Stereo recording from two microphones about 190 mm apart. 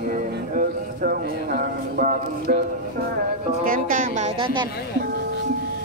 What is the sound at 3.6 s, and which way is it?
Music, 45° right (ahead or behind).